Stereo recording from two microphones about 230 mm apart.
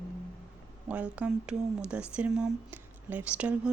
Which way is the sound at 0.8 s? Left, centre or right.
Centre.